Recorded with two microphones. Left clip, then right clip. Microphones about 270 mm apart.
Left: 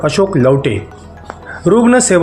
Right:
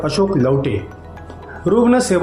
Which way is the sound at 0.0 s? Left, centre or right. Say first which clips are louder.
Left 5 dB; left.